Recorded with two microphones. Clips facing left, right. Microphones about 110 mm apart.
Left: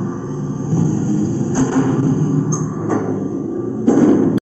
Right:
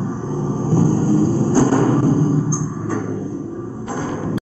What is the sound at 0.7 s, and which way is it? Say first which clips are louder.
Arrow: right 1 dB; 40° right (ahead or behind).